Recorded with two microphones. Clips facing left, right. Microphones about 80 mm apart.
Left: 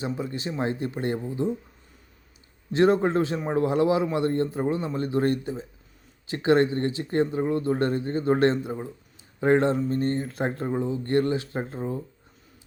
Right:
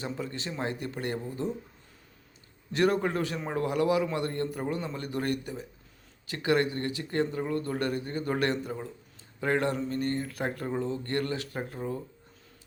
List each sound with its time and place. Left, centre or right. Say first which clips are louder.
0.0 s a man's voice: left 5 dB; centre
2.7 s a man's voice: left 6 dB; left